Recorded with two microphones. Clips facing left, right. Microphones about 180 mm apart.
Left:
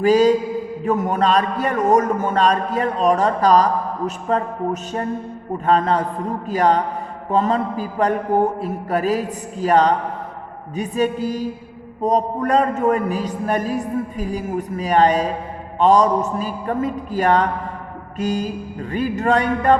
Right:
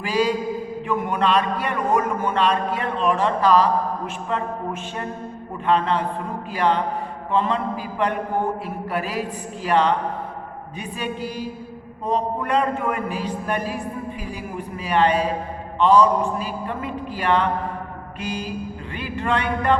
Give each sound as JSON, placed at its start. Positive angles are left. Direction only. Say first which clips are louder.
{"t": 0.0, "sound": "a man's voice", "louder": "left 8 dB", "side_deg": 40}